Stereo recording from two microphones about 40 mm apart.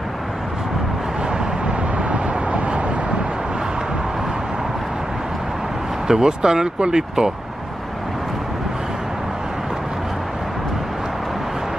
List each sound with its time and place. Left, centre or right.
2.0 s vehicle: right
6.0 s speech: centre